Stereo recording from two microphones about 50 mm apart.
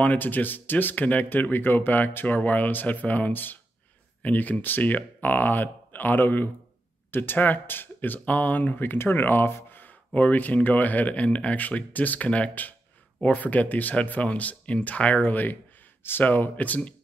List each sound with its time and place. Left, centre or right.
0.0 s speech: left
16.0 s speech: left
16.3 s speech: left